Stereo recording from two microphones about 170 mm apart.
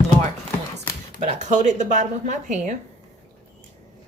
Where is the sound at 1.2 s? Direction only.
45° right (ahead or behind).